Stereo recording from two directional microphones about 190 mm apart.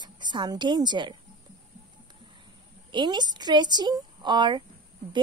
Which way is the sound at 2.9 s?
25° right (ahead or behind).